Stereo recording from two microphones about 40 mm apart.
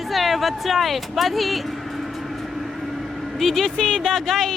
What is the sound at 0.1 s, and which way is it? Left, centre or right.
Speech, centre.